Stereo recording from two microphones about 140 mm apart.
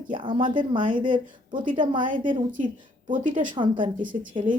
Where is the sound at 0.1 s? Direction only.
35° right (ahead or behind).